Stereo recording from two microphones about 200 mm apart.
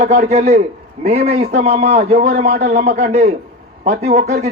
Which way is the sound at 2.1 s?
50° right (ahead or behind).